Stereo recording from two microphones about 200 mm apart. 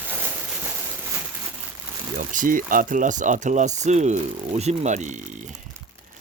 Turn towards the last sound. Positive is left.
turn(degrees=-40)  # may be behind; listen again after turning